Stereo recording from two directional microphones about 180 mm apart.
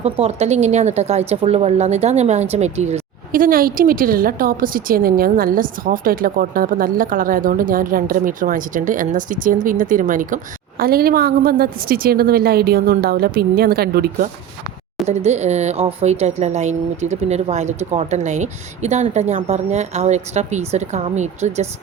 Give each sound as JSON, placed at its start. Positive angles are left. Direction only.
{"t": 0.0, "sound": "a woman's voice", "side_deg": -35}
{"t": 15.0, "sound": "speech", "side_deg": -40}